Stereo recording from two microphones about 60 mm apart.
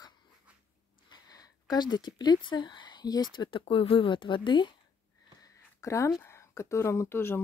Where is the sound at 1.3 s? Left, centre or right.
Left.